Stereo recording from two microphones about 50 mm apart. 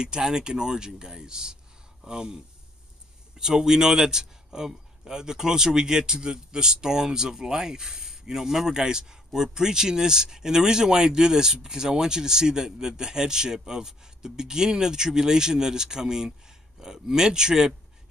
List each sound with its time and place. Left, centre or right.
0.0 s a man's voice: centre